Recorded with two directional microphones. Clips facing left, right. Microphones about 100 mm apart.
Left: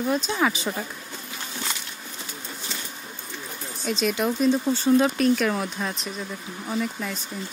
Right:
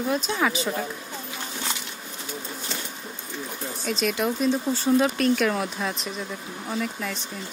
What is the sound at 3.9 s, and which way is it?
Speech, centre (ahead or behind).